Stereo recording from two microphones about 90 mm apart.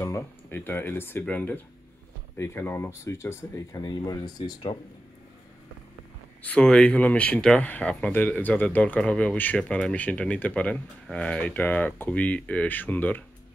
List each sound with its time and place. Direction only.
0.0 s speech: 25° left (ahead or behind)
2.3 s speech: 30° left (ahead or behind)
3.7 s speech: 55° left (ahead or behind)
4.0 s speech: 45° left (ahead or behind)
6.4 s speech: 10° left (ahead or behind)